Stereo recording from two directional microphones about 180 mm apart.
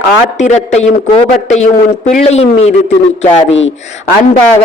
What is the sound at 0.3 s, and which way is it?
A man's voice, 40° left (ahead or behind).